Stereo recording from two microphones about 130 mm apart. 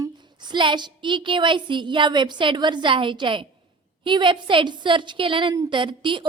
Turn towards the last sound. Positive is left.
turn(degrees=-40)  # may be behind; listen again after turning